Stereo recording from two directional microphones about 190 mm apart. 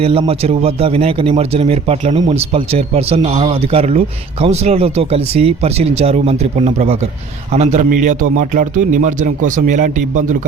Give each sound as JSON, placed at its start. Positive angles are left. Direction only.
{"t": 0.0, "sound": "a man's voice", "side_deg": -30}